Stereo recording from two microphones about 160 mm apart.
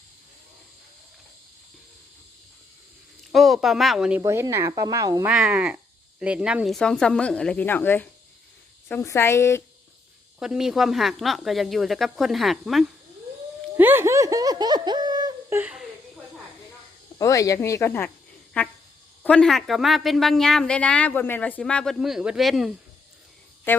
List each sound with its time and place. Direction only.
3.3 s speech: centre (ahead or behind)
4.2 s speech: 20° right (ahead or behind)
5.3 s a woman's voice: 5° right (ahead or behind); by 9.6 s 15° left (ahead or behind)
10.4 s speech: 5° right (ahead or behind)
13.7 s a sound: 15° right (ahead or behind)
15.5 s speech: 5° right (ahead or behind)
17.2 s a woman's voice: 20° left (ahead or behind); by 22.7 s centre (ahead or behind)
23.7 s speech: 10° left (ahead or behind)